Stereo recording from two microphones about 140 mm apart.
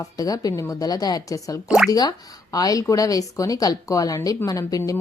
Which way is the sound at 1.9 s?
25° left (ahead or behind).